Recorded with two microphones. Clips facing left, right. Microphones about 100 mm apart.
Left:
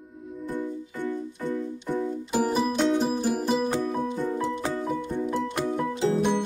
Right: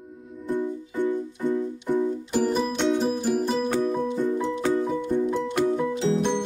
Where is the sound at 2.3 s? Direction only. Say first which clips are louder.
Left 1 dB; 5° left (ahead or behind).